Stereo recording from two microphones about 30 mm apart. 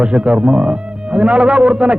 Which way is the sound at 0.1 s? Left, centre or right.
Right.